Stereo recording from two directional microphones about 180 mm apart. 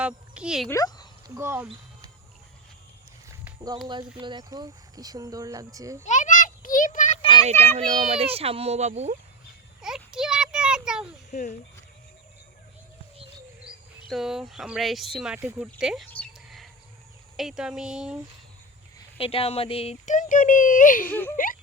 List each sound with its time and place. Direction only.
0.0 s speech: 5° right (ahead or behind)
0.7 s speech: 20° left (ahead or behind)
1.4 s speech: 15° right (ahead or behind)
3.8 s speech: 25° right (ahead or behind)
6.1 s a sound: 45° left (ahead or behind)
7.8 s a child's voice: 35° right (ahead or behind)
9.8 s a sound: 5° right (ahead or behind)
11.3 s speech: 40° left (ahead or behind)
14.1 s speech: centre (ahead or behind)
16.0 s a sound: 5° left (ahead or behind)
17.3 s speech: centre (ahead or behind)
19.1 s speech: 30° left (ahead or behind); by 21.1 s 50° left (ahead or behind)
21.1 s speech: 10° left (ahead or behind)
21.3 s speech: 50° left (ahead or behind)